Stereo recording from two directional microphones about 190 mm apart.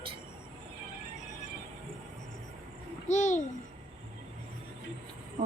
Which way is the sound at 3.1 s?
40° left (ahead or behind).